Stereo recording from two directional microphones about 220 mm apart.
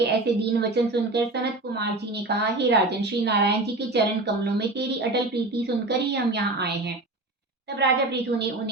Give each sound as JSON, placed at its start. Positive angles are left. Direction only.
{"t": 0.0, "sound": "a woman's voice", "side_deg": -50}
{"t": 7.8, "sound": "a woman's voice", "side_deg": -50}